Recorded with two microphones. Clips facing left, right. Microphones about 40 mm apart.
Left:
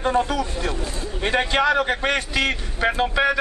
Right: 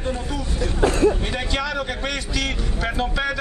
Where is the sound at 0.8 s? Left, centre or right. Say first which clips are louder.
Right 13 dB; right.